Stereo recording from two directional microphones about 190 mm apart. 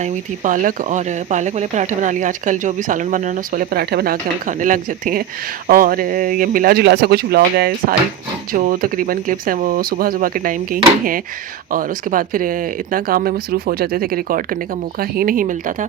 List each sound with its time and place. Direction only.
0.0 s speech: 45° right (ahead or behind)